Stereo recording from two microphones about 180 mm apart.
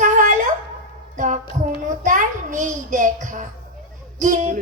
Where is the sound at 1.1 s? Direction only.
45° right (ahead or behind).